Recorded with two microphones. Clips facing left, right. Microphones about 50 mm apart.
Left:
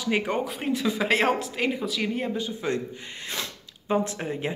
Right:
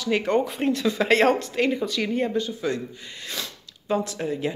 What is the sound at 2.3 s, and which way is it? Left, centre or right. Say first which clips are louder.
Speech: right 2 dB; centre.